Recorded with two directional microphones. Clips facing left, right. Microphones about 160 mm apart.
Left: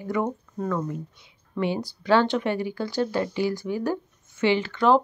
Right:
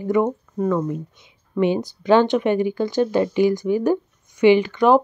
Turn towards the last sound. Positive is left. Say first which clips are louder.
# right 6 dB
turn(degrees=-15)  # may be behind; listen again after turning